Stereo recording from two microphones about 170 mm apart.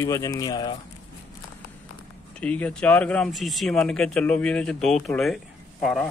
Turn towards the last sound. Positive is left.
turn(degrees=0)  # may be behind; listen again after turning